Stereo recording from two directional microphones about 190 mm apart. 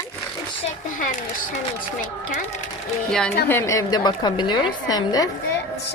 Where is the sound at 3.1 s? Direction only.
5° left (ahead or behind).